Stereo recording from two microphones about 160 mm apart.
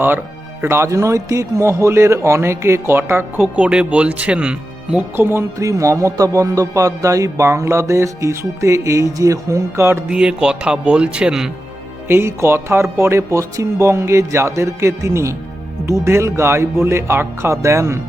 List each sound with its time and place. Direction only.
0.6 s speech: 15° right (ahead or behind)
12.0 s speech: 15° right (ahead or behind)